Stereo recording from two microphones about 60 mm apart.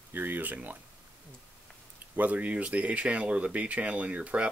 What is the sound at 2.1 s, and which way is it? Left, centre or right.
Speech, right.